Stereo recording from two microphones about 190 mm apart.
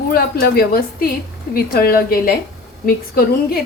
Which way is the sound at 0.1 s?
55° left (ahead or behind).